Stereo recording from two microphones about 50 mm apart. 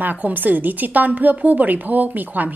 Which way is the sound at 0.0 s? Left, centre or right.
Right.